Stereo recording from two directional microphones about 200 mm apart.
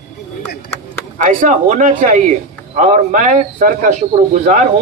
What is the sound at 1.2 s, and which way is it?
A man's voice, 40° right (ahead or behind).